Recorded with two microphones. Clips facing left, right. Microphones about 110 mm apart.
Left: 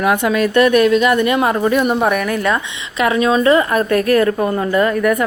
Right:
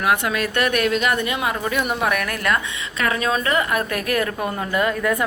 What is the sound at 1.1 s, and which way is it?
Speech, 60° left (ahead or behind).